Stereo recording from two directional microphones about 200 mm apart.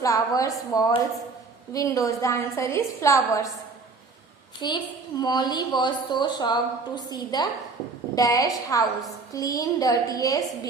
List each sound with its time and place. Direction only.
0.0 s a woman's voice: 15° left (ahead or behind)
4.6 s a woman's voice: 20° left (ahead or behind)